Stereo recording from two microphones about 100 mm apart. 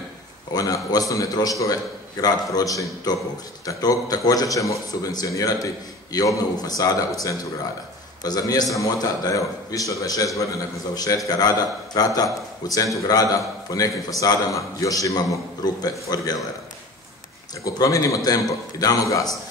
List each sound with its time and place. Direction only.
0.5 s a man's voice: 40° left (ahead or behind)
8.2 s a man's voice: 40° left (ahead or behind)
17.6 s a man's voice: 35° left (ahead or behind)